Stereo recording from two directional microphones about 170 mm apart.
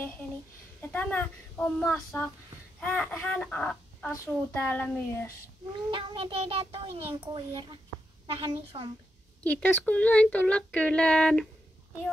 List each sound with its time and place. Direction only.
0.7 s speech: 10° left (ahead or behind)
5.9 s a child's voice: 30° right (ahead or behind)
9.4 s speech: 10° left (ahead or behind)